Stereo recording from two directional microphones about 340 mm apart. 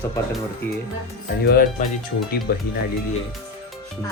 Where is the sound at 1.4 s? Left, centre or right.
Left.